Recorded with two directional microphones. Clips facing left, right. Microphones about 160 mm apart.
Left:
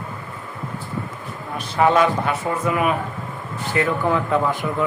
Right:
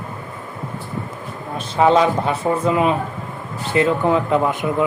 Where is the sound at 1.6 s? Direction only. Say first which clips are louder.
Right 2 dB; 20° right (ahead or behind).